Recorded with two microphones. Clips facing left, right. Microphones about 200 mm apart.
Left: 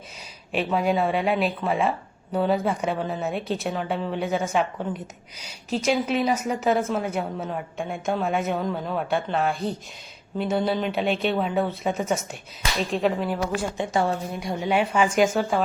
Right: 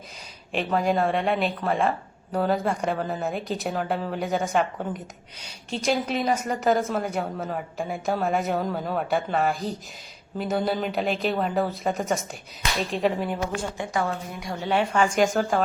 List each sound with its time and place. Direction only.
0.5 s a woman's voice: 5° left (ahead or behind)
5.8 s a woman's voice: centre (ahead or behind)
13.7 s a woman's voice: 25° left (ahead or behind)
14.6 s a woman's voice: 10° left (ahead or behind)